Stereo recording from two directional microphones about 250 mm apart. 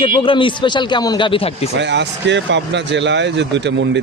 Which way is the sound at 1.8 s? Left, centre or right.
Right.